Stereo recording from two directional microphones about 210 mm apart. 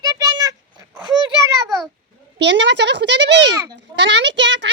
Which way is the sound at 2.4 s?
55° right (ahead or behind).